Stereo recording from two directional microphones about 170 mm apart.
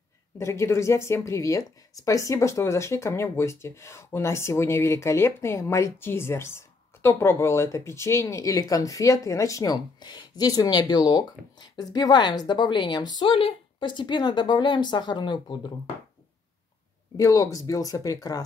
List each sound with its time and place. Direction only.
0.4 s a woman's voice: 15° left (ahead or behind)
17.2 s a woman's voice: 20° left (ahead or behind)